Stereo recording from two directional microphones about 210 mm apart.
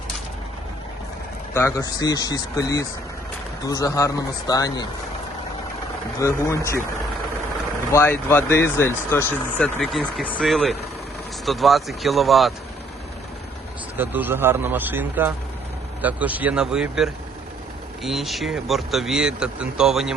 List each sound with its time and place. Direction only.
1.5 s speech: 15° left (ahead or behind)
6.1 s speech: 15° left (ahead or behind)
7.9 s speech: 10° left (ahead or behind)
14.0 s speech: 10° right (ahead or behind)